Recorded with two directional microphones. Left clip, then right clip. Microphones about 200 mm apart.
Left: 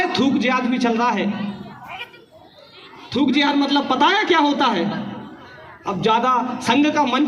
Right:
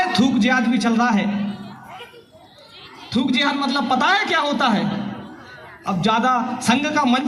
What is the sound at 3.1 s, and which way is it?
A man's voice, 45° left (ahead or behind).